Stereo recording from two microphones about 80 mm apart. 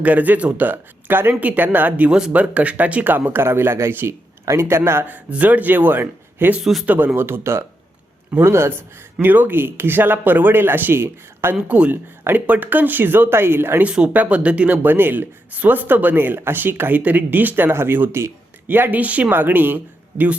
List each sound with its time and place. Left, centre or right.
0.0 s speech: centre
6.6 s speech: centre
6.8 s a man's voice: right
11.7 s speech: centre
13.8 s speech: centre